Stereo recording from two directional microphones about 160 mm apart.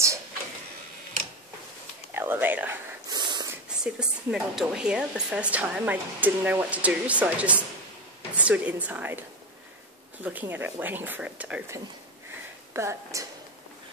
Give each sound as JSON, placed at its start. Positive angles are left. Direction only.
{"t": 2.1, "sound": "speech", "side_deg": -10}
{"t": 3.1, "sound": "snort", "side_deg": -25}
{"t": 3.6, "sound": "speech", "side_deg": -5}
{"t": 10.2, "sound": "speech", "side_deg": -10}
{"t": 12.7, "sound": "a woman's voice", "side_deg": -20}